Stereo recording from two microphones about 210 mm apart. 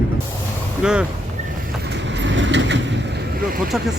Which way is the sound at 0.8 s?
5° right (ahead or behind).